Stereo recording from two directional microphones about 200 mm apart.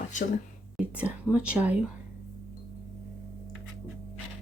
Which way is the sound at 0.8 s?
5° right (ahead or behind).